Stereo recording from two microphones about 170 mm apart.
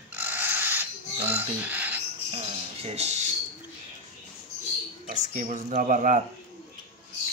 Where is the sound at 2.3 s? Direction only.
35° right (ahead or behind).